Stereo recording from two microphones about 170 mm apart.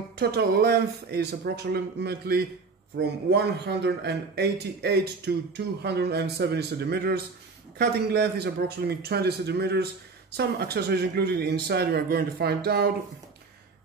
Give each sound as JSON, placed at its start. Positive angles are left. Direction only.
{"t": 0.2, "sound": "speech", "side_deg": -65}